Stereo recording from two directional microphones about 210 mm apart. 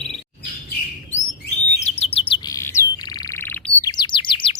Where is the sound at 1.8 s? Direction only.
30° left (ahead or behind).